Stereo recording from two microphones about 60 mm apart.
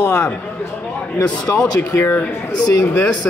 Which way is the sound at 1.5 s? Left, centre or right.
Left.